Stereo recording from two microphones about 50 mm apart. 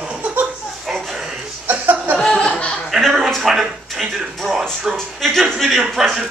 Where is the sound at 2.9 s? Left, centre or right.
Centre.